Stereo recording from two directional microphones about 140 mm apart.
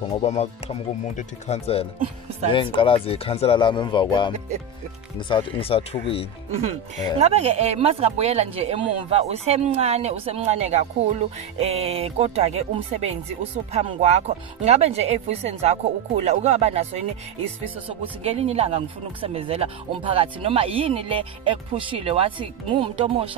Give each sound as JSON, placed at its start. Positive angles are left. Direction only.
{"t": 0.2, "sound": "speech", "side_deg": 50}
{"t": 2.5, "sound": "speech", "side_deg": 35}
{"t": 5.3, "sound": "speech", "side_deg": 40}
{"t": 7.2, "sound": "speech", "side_deg": -50}